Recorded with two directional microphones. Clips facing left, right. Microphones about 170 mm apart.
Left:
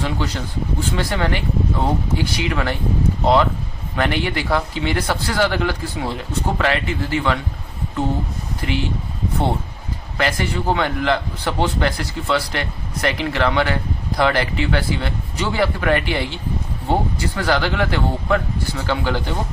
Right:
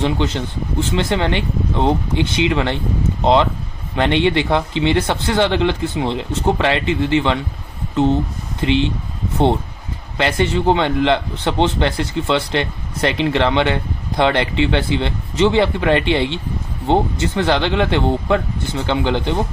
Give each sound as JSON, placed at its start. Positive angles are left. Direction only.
{"t": 0.0, "sound": "a man's voice", "side_deg": -25}
{"t": 8.6, "sound": "a man's voice", "side_deg": -25}
{"t": 10.2, "sound": "a man's voice", "side_deg": -25}